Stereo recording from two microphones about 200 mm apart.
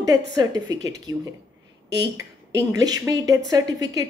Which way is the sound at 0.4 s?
20° right (ahead or behind).